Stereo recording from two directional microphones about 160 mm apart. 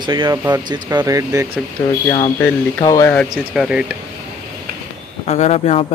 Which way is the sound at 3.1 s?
5° left (ahead or behind).